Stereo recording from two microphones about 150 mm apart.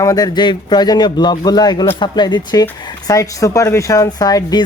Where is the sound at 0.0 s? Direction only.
25° left (ahead or behind).